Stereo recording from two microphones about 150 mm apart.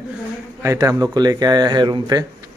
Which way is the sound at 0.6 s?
20° right (ahead or behind).